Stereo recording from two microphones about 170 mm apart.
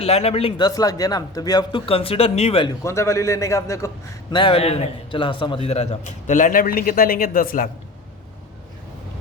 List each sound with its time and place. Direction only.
0.0 s a man's voice: 35° left (ahead or behind)
2.8 s a man's voice: 15° left (ahead or behind); by 7.7 s 55° left (ahead or behind)